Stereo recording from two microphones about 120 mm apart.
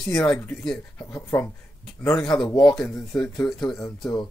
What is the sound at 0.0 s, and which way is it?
Speech, 5° left (ahead or behind).